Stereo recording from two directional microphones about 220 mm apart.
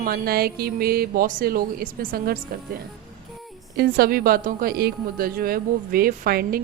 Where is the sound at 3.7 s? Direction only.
45° right (ahead or behind).